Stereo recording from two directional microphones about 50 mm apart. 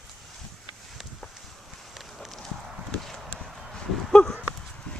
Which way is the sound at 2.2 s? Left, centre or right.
Centre.